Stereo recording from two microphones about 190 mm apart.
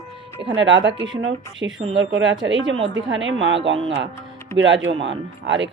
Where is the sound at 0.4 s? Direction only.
75° right (ahead or behind).